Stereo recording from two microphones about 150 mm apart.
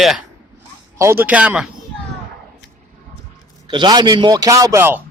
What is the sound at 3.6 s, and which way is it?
A man's voice, 30° right (ahead or behind).